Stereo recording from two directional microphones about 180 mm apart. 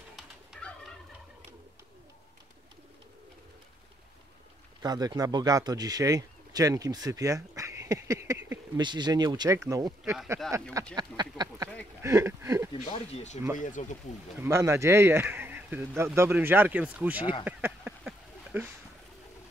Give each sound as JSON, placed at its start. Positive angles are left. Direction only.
{"t": 0.1, "sound": "bird", "side_deg": 5}
{"t": 4.8, "sound": "speech", "side_deg": -20}
{"t": 10.4, "sound": "speech", "side_deg": 5}
{"t": 11.0, "sound": "speech", "side_deg": -25}
{"t": 12.9, "sound": "speech", "side_deg": 35}
{"t": 14.4, "sound": "speech", "side_deg": -15}
{"t": 17.2, "sound": "speech", "side_deg": 25}
{"t": 17.5, "sound": "a sound", "side_deg": -10}